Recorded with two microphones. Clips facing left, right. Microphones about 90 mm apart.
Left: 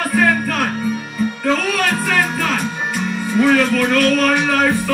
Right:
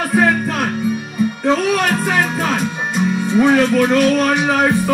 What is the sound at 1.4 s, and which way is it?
Music, 20° right (ahead or behind).